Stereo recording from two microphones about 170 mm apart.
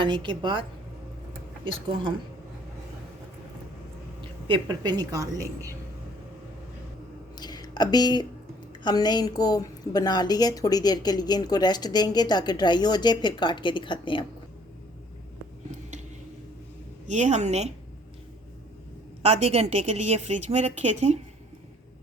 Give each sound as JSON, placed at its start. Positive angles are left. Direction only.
{"t": 0.0, "sound": "a woman's voice", "side_deg": -30}
{"t": 4.4, "sound": "a woman's voice", "side_deg": -25}
{"t": 7.3, "sound": "a sound", "side_deg": 25}
{"t": 8.8, "sound": "a woman's voice", "side_deg": 25}
{"t": 17.1, "sound": "a woman's voice", "side_deg": -40}
{"t": 19.2, "sound": "a woman's voice", "side_deg": -35}